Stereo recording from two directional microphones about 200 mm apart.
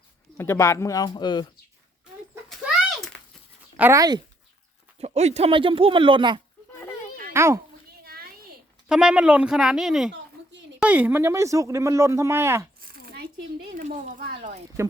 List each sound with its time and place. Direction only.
0.3 s speech: 15° left (ahead or behind)
3.8 s speech: 15° right (ahead or behind)
4.9 s speech: 35° right (ahead or behind)
7.3 s speech: 15° right (ahead or behind)
8.0 s a sound: 50° right (ahead or behind)
8.9 s speech: 5° right (ahead or behind)
13.1 s speech: 45° right (ahead or behind)
14.8 s speech: 15° right (ahead or behind)